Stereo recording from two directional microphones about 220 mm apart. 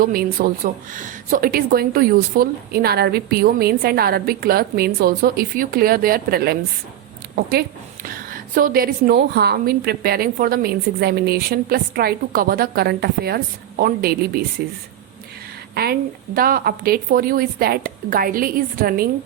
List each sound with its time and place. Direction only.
0.0 s a woman's voice: 40° right (ahead or behind)
8.0 s a woman's voice: 40° right (ahead or behind)
15.7 s a woman's voice: 45° right (ahead or behind)